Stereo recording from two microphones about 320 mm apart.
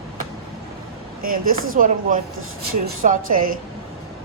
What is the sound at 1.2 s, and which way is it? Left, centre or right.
Speech, right.